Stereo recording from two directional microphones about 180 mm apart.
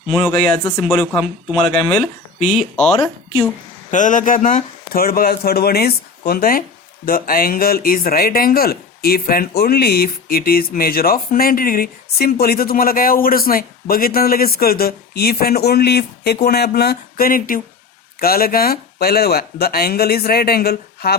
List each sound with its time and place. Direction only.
0.3 s speech: 5° left (ahead or behind)
2.5 s speech: centre (ahead or behind)
3.9 s speech: 45° left (ahead or behind)